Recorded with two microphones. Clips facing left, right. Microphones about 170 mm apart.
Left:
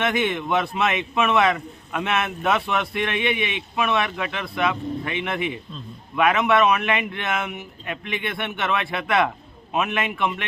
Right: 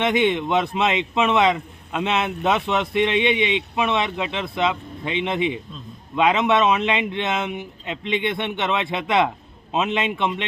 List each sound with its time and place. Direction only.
0.0 s a man's voice: 20° right (ahead or behind)